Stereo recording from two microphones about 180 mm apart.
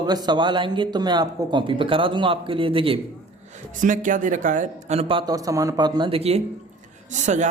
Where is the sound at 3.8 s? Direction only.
45° right (ahead or behind).